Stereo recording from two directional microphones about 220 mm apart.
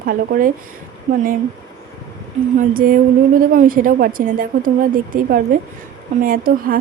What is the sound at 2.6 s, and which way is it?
A woman's voice, 40° right (ahead or behind).